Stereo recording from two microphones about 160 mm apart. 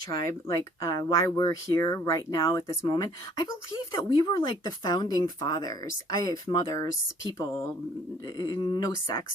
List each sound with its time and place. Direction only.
0.3 s speech: 20° left (ahead or behind)
8.4 s speech: 25° left (ahead or behind)